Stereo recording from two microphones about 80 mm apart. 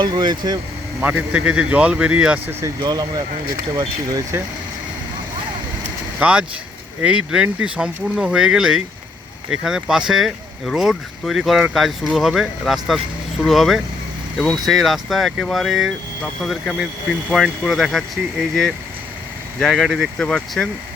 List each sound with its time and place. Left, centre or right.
0.0 s speech: right
1.0 s speech: centre
2.5 s speech: right
2.8 s speech: right
6.1 s speech: centre
16.7 s speech: centre
17.3 s speech: centre
19.7 s speech: centre